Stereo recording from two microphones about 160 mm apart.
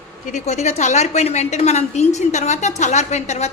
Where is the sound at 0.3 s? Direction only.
45° left (ahead or behind).